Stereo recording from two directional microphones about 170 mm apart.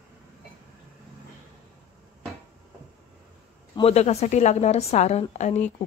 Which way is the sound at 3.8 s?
40° left (ahead or behind).